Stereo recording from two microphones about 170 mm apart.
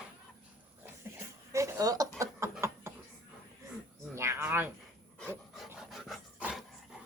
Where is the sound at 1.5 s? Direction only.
15° right (ahead or behind).